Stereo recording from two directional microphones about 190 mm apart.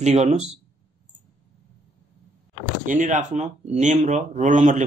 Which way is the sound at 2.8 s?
40° right (ahead or behind).